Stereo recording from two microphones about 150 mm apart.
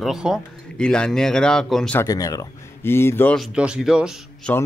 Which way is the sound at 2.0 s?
25° left (ahead or behind).